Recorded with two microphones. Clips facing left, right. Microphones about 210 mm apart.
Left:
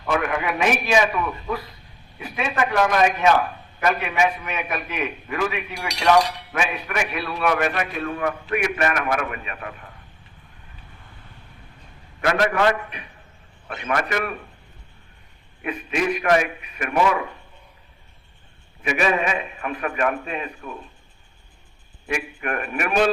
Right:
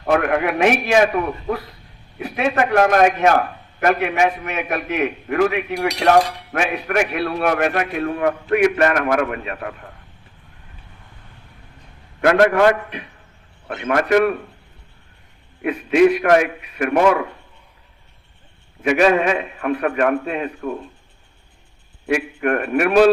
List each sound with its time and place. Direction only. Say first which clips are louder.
0.0 s speech: right 6 dB; 60° right (ahead or behind)
2.1 s a man's voice: right 5 dB; 65° right (ahead or behind); by 4.8 s 50° right (ahead or behind)
4.9 s speech: right 7 dB; 65° right (ahead or behind)
12.2 s a man's voice: right 6 dB; 60° right (ahead or behind)
15.6 s a man's voice: right 10 dB; 70° right (ahead or behind)
18.8 s speech: right 7 dB; 65° right (ahead or behind)
22.0 s speech: right 8 dB; 65° right (ahead or behind)